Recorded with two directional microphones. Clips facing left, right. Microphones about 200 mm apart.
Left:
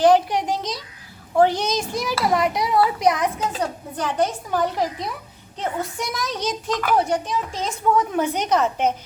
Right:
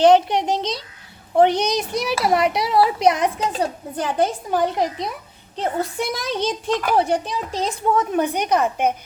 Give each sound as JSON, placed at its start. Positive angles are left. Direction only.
{"t": 0.0, "sound": "a woman's voice", "side_deg": -25}
{"t": 1.5, "sound": "a child's voice", "side_deg": -65}
{"t": 2.1, "sound": "a woman's voice", "side_deg": -20}
{"t": 2.5, "sound": "a child's voice", "side_deg": -75}
{"t": 2.7, "sound": "a woman's voice", "side_deg": -25}
{"t": 8.1, "sound": "speech", "side_deg": -15}